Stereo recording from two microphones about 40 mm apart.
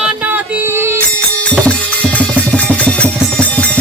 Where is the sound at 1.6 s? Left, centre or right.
Left.